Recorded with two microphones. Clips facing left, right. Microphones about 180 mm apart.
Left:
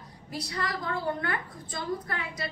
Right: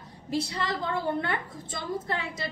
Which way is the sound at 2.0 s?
25° right (ahead or behind).